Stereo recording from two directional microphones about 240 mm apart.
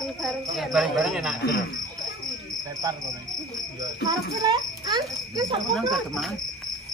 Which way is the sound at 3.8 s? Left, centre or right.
Centre.